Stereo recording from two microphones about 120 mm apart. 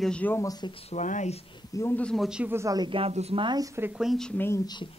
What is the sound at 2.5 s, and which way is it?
Speech, 20° right (ahead or behind).